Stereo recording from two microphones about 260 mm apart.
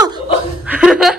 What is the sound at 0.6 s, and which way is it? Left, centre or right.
Speech, centre.